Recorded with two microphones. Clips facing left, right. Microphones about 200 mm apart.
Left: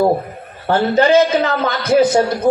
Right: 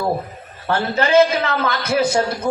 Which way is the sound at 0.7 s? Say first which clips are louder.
Left 5 dB; 30° left (ahead or behind).